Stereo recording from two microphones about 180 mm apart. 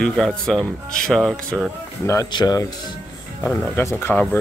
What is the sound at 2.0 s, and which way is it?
Speech, 20° left (ahead or behind).